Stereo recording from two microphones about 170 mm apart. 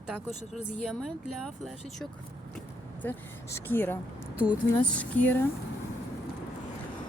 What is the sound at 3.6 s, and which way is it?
A woman's voice, 10° left (ahead or behind).